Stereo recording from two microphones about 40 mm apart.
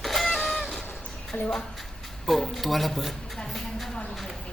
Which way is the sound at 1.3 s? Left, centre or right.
Left.